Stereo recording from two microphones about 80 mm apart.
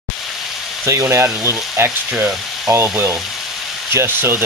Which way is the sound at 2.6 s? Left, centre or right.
Right.